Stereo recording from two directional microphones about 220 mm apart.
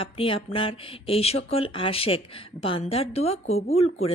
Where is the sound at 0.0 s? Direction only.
25° left (ahead or behind).